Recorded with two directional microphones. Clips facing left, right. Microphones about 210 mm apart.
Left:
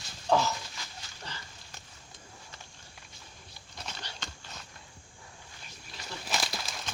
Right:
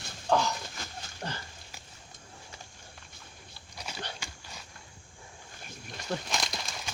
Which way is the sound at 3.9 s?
10° right (ahead or behind).